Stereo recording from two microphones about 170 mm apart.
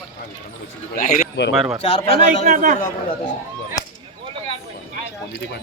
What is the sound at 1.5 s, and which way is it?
Speech, 5° right (ahead or behind).